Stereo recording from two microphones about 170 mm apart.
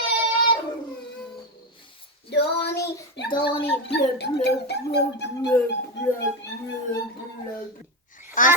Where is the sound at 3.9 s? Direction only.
75° left (ahead or behind).